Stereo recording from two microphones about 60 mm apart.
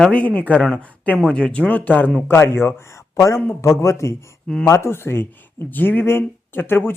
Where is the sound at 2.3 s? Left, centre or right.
Left.